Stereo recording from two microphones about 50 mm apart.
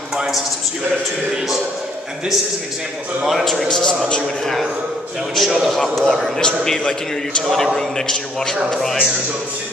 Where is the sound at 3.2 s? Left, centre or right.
Centre.